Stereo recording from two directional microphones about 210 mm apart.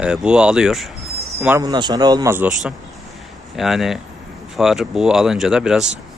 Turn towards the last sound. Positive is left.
turn(degrees=-5)  # may be behind; listen again after turning